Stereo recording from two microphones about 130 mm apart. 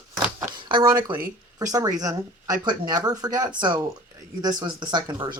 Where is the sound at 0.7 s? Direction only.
30° right (ahead or behind).